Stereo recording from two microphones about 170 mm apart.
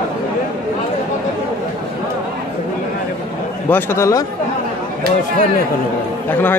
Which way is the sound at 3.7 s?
15° left (ahead or behind).